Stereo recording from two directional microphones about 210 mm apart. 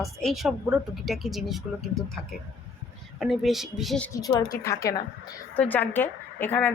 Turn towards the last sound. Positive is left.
turn(degrees=10)  # may be behind; listen again after turning